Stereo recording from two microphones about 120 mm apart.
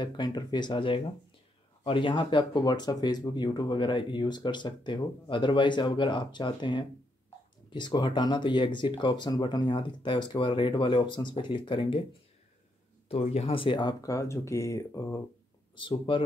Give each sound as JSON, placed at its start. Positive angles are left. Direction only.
{"t": 0.0, "sound": "speech", "side_deg": 35}
{"t": 13.1, "sound": "speech", "side_deg": 60}
{"t": 16.1, "sound": "speech", "side_deg": 45}